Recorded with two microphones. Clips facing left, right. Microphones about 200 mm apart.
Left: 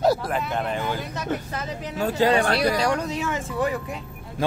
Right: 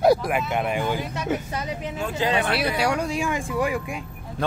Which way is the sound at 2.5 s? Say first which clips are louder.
Left 2 dB; 10° right (ahead or behind).